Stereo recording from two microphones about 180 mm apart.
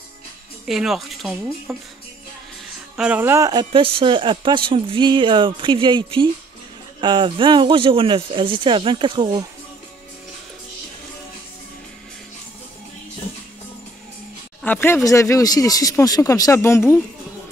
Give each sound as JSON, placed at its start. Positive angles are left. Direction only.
{"t": 0.7, "sound": "speech", "side_deg": 0}
{"t": 3.0, "sound": "speech", "side_deg": -10}
{"t": 14.6, "sound": "speech", "side_deg": 10}